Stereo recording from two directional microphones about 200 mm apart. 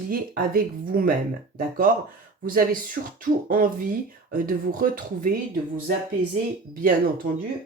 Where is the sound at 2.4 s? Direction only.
45° right (ahead or behind).